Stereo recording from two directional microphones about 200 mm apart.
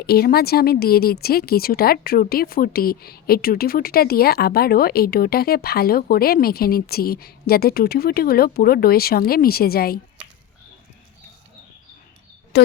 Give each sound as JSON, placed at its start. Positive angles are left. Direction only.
{"t": 0.0, "sound": "speech", "side_deg": 50}
{"t": 12.5, "sound": "speech", "side_deg": 55}